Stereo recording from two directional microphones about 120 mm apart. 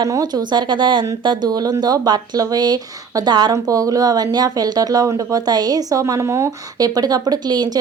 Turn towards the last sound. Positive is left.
turn(degrees=-35)  # may be behind; listen again after turning